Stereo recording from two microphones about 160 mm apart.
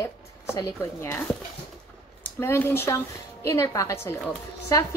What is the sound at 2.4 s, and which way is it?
A woman's voice, 15° left (ahead or behind).